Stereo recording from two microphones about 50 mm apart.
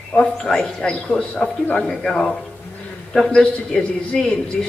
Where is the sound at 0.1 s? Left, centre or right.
Centre.